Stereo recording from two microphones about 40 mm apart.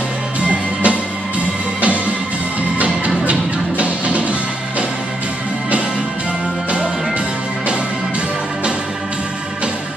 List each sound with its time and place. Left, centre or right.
0.4 s music: right
3.3 s music: right